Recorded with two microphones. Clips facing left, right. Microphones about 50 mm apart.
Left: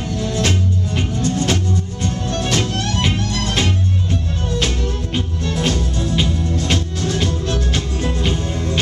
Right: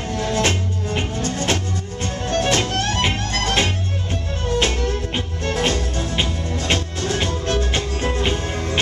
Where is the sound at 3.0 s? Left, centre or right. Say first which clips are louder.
Left 1 dB; right.